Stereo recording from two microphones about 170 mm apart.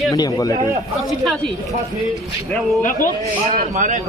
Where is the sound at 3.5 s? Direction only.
50° right (ahead or behind).